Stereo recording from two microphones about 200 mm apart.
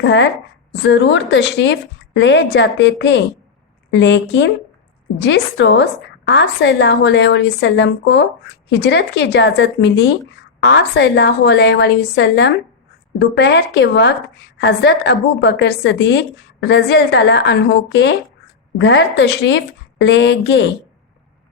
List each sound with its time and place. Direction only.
0.0 s a woman's voice: 60° left (ahead or behind)